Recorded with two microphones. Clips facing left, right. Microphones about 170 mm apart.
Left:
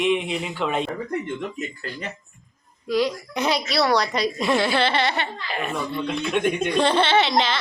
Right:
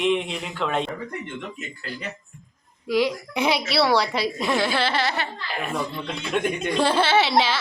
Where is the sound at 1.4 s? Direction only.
40° left (ahead or behind).